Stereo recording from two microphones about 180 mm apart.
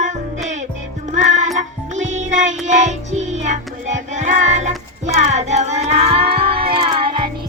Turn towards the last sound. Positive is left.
turn(degrees=-30)  # may be behind; listen again after turning